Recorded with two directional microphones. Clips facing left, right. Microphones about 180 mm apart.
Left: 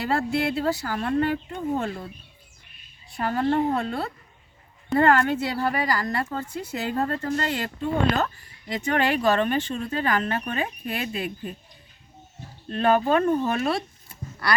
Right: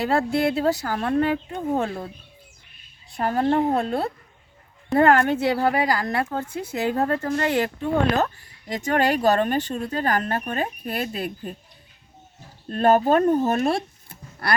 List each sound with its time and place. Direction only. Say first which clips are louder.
0.0 s speech: right 3 dB; 45° right (ahead or behind)
3.2 s speech: right 2 dB; 45° right (ahead or behind)
8.7 s speech: right 2 dB; 40° right (ahead or behind)
12.6 s speech: right 3 dB; 40° right (ahead or behind)